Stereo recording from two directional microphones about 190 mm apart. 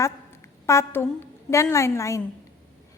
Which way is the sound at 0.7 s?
15° left (ahead or behind).